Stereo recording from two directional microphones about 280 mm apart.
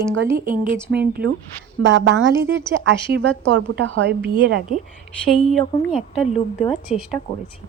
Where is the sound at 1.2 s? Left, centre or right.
Right.